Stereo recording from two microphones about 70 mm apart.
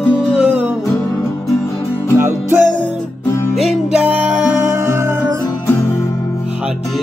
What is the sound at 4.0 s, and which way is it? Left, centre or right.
Music, right.